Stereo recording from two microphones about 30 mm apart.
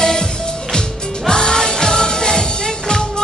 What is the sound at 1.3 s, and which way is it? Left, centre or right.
Music, left.